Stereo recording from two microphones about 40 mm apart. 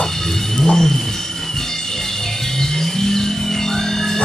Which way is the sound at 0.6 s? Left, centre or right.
Left.